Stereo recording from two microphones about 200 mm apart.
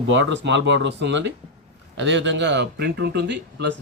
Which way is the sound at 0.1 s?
65° right (ahead or behind).